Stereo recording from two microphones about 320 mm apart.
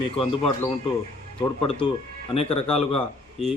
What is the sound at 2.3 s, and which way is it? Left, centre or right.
Speech, centre.